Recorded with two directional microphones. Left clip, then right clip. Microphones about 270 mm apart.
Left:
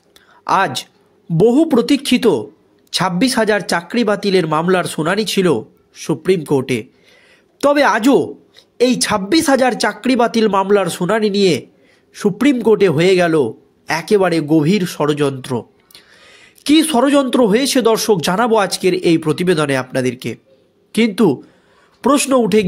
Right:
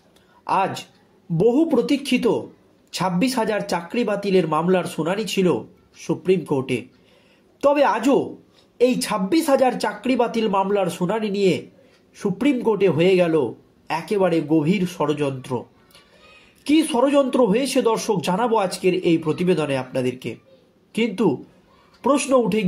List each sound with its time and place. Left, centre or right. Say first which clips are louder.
0.4 s a man's voice: left 6 dB; left